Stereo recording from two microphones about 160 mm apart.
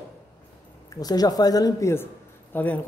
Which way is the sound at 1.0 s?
25° left (ahead or behind).